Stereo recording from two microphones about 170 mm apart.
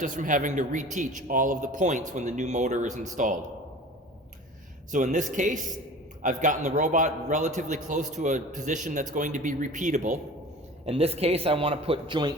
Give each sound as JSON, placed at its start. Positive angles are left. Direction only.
{"t": 0.0, "sound": "a man's voice", "side_deg": -50}
{"t": 4.9, "sound": "a man's voice", "side_deg": -50}